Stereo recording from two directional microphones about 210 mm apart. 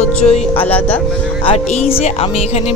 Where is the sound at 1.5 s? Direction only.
30° left (ahead or behind).